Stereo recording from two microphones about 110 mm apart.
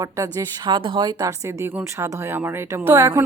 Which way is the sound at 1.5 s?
20° right (ahead or behind).